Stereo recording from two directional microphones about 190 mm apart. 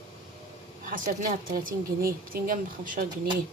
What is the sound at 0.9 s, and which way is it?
Speech, 45° right (ahead or behind).